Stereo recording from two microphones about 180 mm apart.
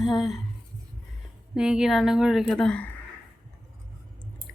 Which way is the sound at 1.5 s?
5° right (ahead or behind).